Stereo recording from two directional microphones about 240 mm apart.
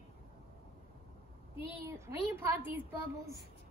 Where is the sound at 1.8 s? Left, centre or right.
Centre.